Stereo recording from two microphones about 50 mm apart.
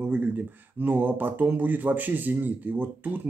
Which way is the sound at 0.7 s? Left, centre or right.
Right.